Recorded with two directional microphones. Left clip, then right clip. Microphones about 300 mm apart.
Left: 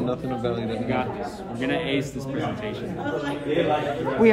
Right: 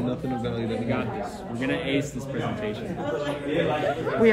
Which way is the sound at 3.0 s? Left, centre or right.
Right.